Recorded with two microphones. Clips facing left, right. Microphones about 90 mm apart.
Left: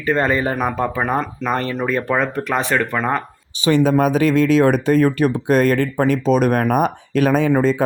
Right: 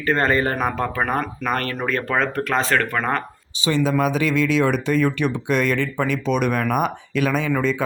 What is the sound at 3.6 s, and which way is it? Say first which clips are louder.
Speech: left 5 dB; 50° left (ahead or behind).